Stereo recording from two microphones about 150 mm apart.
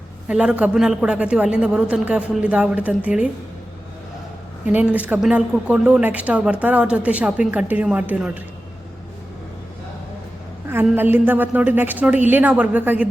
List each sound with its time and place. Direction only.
0.3 s speech: 5° right (ahead or behind)
4.6 s speech: 10° right (ahead or behind)
10.9 s speech: 15° right (ahead or behind)